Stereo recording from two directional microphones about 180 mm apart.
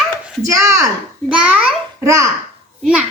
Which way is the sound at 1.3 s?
5° right (ahead or behind).